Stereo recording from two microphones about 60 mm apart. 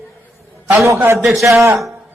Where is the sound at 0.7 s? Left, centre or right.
Right.